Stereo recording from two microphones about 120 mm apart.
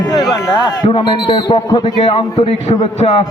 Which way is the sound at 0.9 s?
45° left (ahead or behind).